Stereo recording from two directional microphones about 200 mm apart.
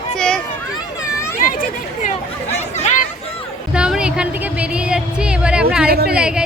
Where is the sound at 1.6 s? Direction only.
35° left (ahead or behind).